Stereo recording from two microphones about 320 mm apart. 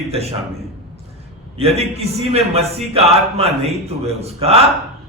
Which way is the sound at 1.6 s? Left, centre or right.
Centre.